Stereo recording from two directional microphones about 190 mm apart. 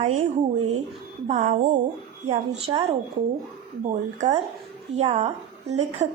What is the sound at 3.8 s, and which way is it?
A woman's voice, 40° right (ahead or behind).